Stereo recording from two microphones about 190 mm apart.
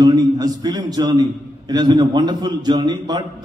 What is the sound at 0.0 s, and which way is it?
A man's voice, 20° right (ahead or behind).